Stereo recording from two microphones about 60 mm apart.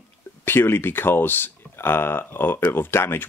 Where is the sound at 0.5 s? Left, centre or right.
Left.